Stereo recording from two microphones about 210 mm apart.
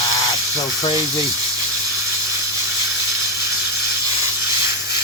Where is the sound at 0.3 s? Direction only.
15° left (ahead or behind).